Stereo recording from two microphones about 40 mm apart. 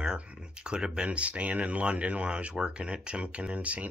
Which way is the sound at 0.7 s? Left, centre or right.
Centre.